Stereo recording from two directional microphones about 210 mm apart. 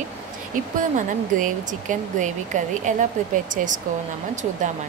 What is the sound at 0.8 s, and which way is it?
Speech, 40° right (ahead or behind).